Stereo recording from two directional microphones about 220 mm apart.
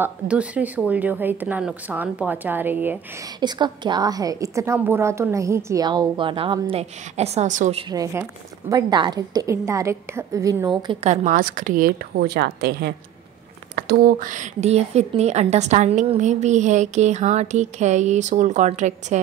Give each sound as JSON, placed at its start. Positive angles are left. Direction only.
{"t": 0.0, "sound": "speech", "side_deg": -5}
{"t": 3.3, "sound": "a woman's voice", "side_deg": -20}
{"t": 7.9, "sound": "speech", "side_deg": -15}
{"t": 10.8, "sound": "a woman's voice", "side_deg": -25}